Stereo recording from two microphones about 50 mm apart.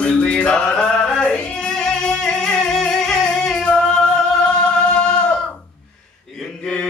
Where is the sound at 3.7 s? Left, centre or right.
Centre.